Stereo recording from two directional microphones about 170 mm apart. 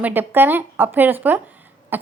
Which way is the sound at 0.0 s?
10° right (ahead or behind).